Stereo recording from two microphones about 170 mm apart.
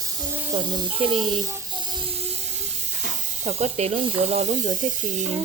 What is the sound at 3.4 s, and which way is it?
Speech, 40° right (ahead or behind).